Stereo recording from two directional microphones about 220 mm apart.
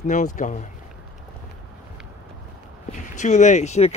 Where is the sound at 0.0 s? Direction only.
35° left (ahead or behind).